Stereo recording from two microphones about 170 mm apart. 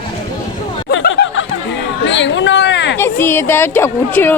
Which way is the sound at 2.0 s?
90° left.